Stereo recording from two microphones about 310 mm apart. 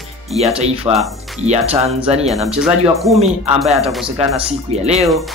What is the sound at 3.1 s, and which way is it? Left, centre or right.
Speech, centre.